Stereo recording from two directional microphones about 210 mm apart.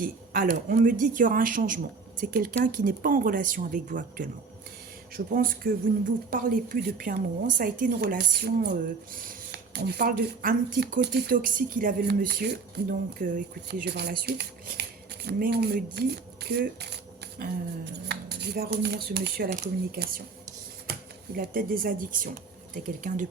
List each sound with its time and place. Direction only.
0.0 s speech: 40° right (ahead or behind)
21.3 s speech: 45° right (ahead or behind)